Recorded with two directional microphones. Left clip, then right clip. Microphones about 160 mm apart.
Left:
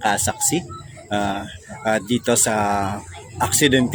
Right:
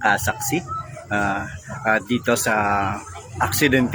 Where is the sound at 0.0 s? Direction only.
35° left (ahead or behind).